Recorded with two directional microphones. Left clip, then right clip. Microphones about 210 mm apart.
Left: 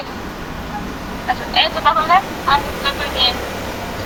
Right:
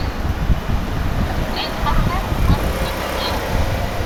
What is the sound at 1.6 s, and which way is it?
Vehicle, 35° left (ahead or behind).